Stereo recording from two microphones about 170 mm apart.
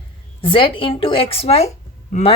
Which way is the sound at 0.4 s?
30° left (ahead or behind).